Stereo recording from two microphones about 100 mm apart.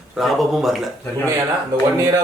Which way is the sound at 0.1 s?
Centre (ahead or behind).